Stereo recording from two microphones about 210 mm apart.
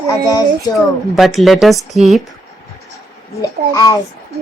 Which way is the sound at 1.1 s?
Centre (ahead or behind).